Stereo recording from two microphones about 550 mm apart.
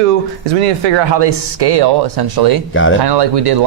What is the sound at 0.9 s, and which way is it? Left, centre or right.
Speech, right.